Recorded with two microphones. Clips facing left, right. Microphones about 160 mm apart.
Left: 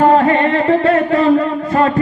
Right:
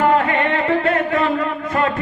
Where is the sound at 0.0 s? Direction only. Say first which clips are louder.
Left 5 dB; 35° left (ahead or behind).